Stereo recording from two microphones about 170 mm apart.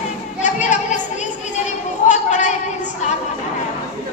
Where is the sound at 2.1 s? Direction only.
45° left (ahead or behind).